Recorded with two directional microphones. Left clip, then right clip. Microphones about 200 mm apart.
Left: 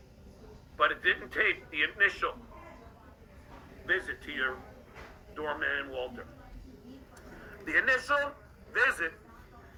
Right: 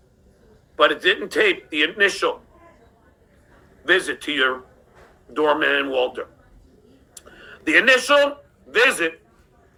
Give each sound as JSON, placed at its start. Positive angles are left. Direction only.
{"t": 0.8, "sound": "speech", "side_deg": -55}
{"t": 3.8, "sound": "speech", "side_deg": -45}
{"t": 7.6, "sound": "a man's voice", "side_deg": -45}